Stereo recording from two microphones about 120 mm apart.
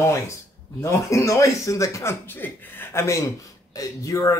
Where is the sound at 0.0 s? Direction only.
25° left (ahead or behind).